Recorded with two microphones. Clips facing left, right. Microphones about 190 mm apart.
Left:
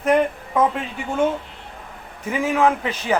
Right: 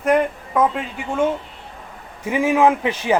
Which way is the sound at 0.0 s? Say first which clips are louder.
Even; 5° left (ahead or behind).